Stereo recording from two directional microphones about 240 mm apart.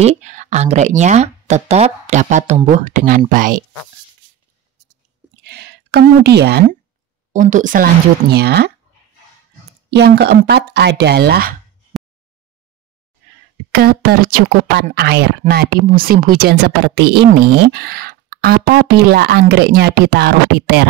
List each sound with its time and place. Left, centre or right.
0.0 s speech: right
5.4 s a sound: right
7.3 s speech: right
9.8 s speech: right
13.7 s speech: right